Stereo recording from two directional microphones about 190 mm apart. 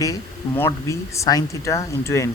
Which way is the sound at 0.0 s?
15° left (ahead or behind).